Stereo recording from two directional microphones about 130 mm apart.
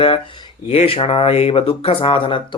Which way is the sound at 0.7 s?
50° left (ahead or behind).